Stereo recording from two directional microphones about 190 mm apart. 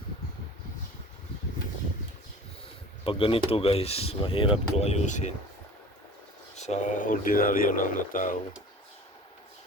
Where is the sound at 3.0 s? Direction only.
30° left (ahead or behind).